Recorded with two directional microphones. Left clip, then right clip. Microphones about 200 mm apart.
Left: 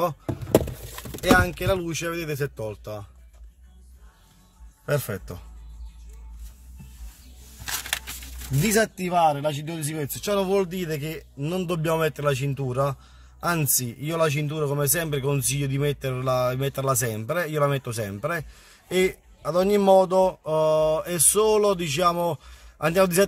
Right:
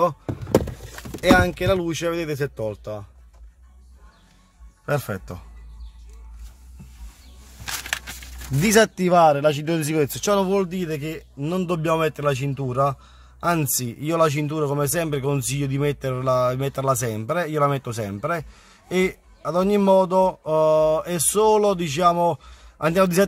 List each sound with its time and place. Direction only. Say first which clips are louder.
0.0 s vehicle: right 5 dB; 15° right (ahead or behind)
1.2 s speech: right 3 dB; 20° right (ahead or behind)
4.8 s speech: right 2 dB; 10° right (ahead or behind)
7.6 s a sound: right 2 dB; 25° right (ahead or behind)
8.6 s speech: right 6 dB; 30° right (ahead or behind)
9.0 s speech: right 6 dB; 40° right (ahead or behind)
10.3 s speech: right 1 dB; 10° right (ahead or behind)